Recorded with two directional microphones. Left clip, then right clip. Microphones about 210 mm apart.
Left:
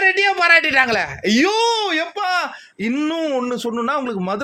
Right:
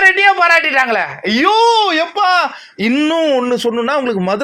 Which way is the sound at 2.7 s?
10° right (ahead or behind).